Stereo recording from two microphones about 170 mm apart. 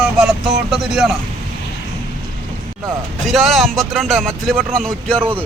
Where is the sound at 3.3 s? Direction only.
Centre (ahead or behind).